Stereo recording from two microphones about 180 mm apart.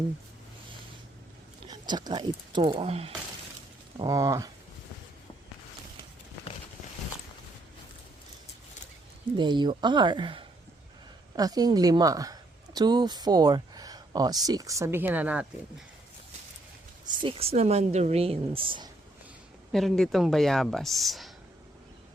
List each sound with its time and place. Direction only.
1.6 s speech: 25° right (ahead or behind)
3.9 s speech: 20° right (ahead or behind)
9.4 s a woman's voice: 25° right (ahead or behind); by 15.4 s 10° right (ahead or behind)
17.2 s speech: 35° right (ahead or behind)
19.7 s speech: centre (ahead or behind)